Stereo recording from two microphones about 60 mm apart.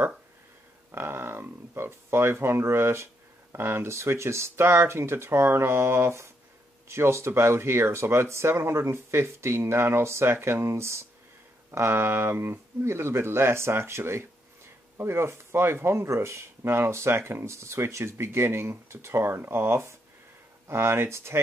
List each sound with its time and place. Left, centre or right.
0.9 s speech: right